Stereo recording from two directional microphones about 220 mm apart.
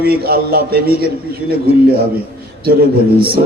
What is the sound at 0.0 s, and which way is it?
Speech, 45° right (ahead or behind).